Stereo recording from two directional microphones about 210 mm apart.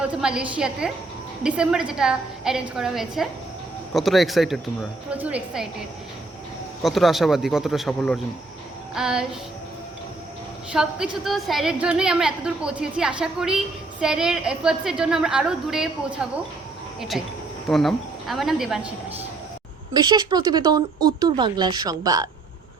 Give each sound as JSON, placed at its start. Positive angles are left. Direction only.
{"t": 0.0, "sound": "a woman's voice", "side_deg": -5}
{"t": 6.8, "sound": "a woman's voice", "side_deg": 0}
{"t": 10.7, "sound": "a woman's voice", "side_deg": -5}
{"t": 19.9, "sound": "speech", "side_deg": -20}